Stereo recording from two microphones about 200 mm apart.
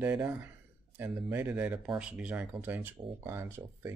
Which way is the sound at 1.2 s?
5° right (ahead or behind).